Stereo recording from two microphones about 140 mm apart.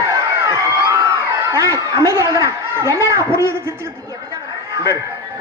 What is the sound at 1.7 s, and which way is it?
A woman's voice, 20° right (ahead or behind).